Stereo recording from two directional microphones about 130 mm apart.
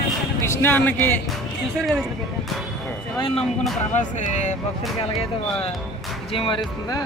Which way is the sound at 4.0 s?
70° left (ahead or behind).